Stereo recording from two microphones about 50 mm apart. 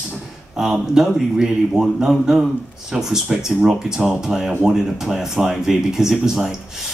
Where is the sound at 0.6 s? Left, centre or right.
Centre.